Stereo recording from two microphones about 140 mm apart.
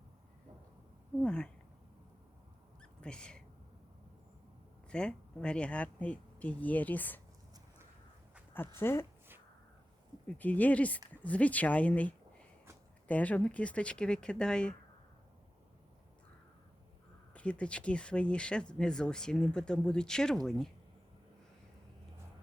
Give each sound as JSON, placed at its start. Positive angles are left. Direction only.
{"t": 1.2, "sound": "speech", "side_deg": 5}
{"t": 2.8, "sound": "a sound", "side_deg": 5}
{"t": 4.9, "sound": "speech", "side_deg": 5}
{"t": 8.5, "sound": "speech", "side_deg": 15}
{"t": 10.2, "sound": "speech", "side_deg": 10}
{"t": 17.3, "sound": "speech", "side_deg": 10}